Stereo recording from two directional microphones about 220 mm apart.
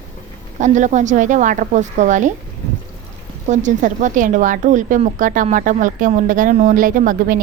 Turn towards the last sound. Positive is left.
turn(degrees=-40)  # may be behind; listen again after turning